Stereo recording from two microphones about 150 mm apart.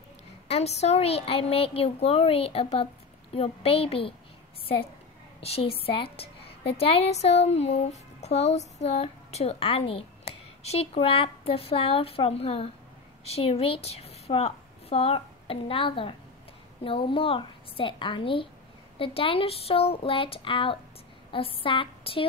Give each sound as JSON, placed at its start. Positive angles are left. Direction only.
{"t": 0.5, "sound": "a woman's voice", "side_deg": 45}
{"t": 5.4, "sound": "a woman's voice", "side_deg": 40}